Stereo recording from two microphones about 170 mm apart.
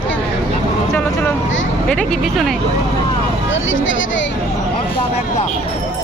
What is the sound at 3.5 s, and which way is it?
Speech, 90° left.